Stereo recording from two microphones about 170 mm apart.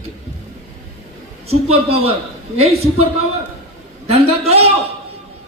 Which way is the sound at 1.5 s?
35° right (ahead or behind).